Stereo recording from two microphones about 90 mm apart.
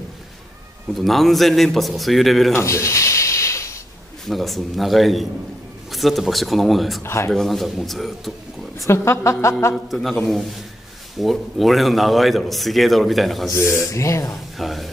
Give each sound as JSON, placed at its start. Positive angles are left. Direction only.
{"t": 0.9, "sound": "a man's voice", "side_deg": 0}
{"t": 2.5, "sound": "a sound", "side_deg": 30}
{"t": 4.3, "sound": "a man's voice", "side_deg": 0}
{"t": 7.0, "sound": "speech", "side_deg": 30}
{"t": 7.2, "sound": "a man's voice", "side_deg": 5}
{"t": 8.8, "sound": "a woman's voice", "side_deg": 30}
{"t": 9.8, "sound": "a man's voice", "side_deg": 0}
{"t": 11.1, "sound": "a man's voice", "side_deg": 0}
{"t": 13.5, "sound": "a woman's voice", "side_deg": 30}
{"t": 14.6, "sound": "a man's voice", "side_deg": 0}